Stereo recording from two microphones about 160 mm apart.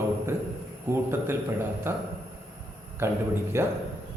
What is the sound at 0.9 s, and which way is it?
A man's voice, 15° right (ahead or behind).